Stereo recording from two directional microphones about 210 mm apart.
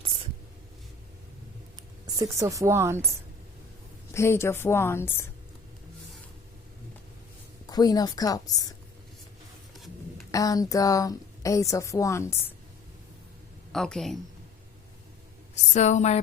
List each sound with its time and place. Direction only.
2.1 s speech: 15° right (ahead or behind)
4.1 s a woman's voice: 10° left (ahead or behind)
7.7 s a woman's voice: 20° left (ahead or behind)
10.3 s a woman's voice: 15° left (ahead or behind)
13.7 s a woman's voice: centre (ahead or behind)
15.7 s a woman's voice: 35° left (ahead or behind)